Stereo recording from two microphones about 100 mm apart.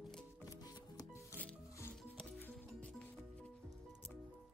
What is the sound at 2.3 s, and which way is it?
Music, 20° left (ahead or behind).